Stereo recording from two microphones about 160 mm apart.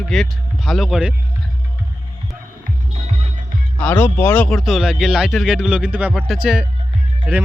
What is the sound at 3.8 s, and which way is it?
Speech, 10° left (ahead or behind).